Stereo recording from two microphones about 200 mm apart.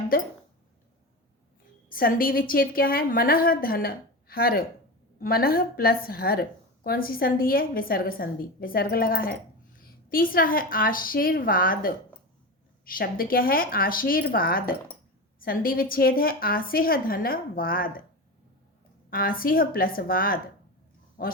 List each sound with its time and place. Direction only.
0.1 s a woman's voice: 45° left (ahead or behind)
1.9 s a woman's voice: 45° left (ahead or behind)
19.1 s a woman's voice: 45° left (ahead or behind)